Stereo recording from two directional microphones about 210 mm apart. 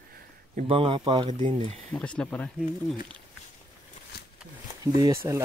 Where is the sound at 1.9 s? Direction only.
5° left (ahead or behind).